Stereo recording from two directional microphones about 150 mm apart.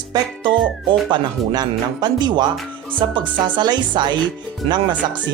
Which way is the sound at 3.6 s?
30° right (ahead or behind).